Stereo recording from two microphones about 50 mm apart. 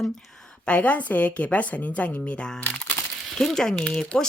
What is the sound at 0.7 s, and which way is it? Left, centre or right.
Speech, left.